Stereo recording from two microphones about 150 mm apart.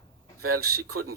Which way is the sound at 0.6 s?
90° right.